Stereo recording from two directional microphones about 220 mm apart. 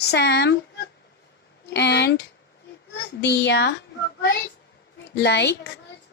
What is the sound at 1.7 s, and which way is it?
Speech, 50° left (ahead or behind).